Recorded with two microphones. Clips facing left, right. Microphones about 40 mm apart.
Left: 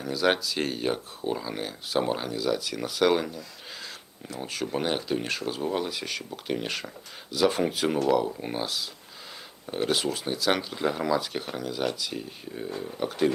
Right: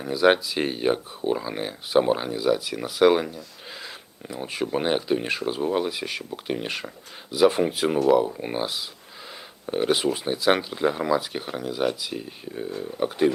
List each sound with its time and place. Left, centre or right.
0.0 s speech: centre